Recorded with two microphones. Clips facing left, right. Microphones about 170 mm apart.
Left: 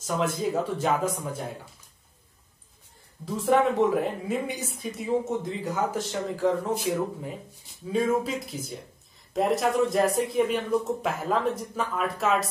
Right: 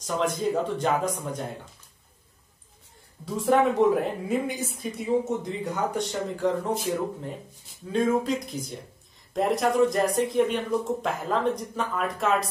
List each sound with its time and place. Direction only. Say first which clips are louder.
0.0 s a woman's voice: right 1 dB; 5° left (ahead or behind)
3.3 s a woman's voice: right 1 dB; centre (ahead or behind)